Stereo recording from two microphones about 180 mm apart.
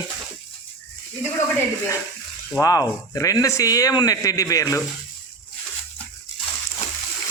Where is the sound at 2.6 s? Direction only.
20° left (ahead or behind).